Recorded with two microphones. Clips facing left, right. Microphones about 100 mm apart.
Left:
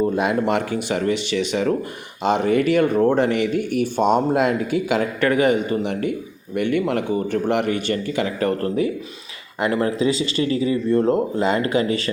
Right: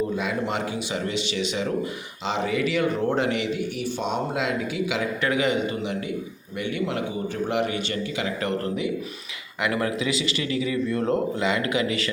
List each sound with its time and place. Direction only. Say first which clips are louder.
0.2 s speech: left 7 dB; 55° left (ahead or behind)
9.6 s speech: left 5 dB; 35° left (ahead or behind)